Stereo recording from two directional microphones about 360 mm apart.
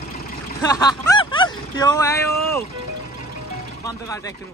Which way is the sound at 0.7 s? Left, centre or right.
Centre.